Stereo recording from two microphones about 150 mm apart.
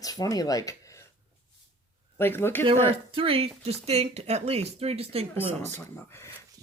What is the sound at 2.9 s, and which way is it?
Speech, 35° right (ahead or behind).